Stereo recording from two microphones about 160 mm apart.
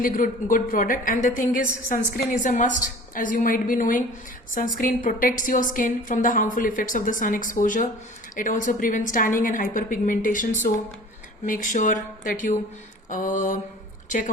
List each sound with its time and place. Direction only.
0.0 s a woman's voice: 60° left (ahead or behind)
13.1 s mantra: 55° left (ahead or behind)